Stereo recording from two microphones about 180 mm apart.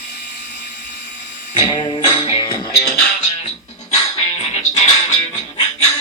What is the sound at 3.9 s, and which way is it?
Music, 30° left (ahead or behind).